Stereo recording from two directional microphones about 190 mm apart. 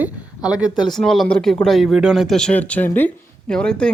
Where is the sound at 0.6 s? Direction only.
20° left (ahead or behind).